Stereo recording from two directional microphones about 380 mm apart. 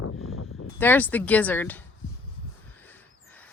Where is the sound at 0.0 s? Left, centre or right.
Left.